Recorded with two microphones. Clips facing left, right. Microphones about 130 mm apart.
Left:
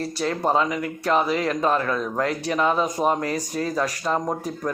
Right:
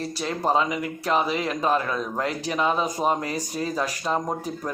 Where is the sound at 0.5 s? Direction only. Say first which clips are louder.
Left 1 dB; 15° right (ahead or behind).